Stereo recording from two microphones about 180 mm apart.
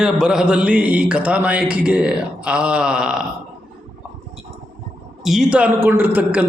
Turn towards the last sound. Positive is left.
turn(degrees=-10)  # may be behind; listen again after turning